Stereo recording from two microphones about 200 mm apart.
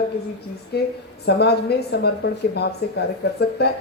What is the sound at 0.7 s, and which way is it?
Speech, 55° left (ahead or behind).